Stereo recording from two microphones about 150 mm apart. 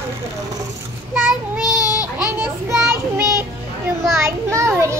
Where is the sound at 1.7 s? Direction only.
25° left (ahead or behind).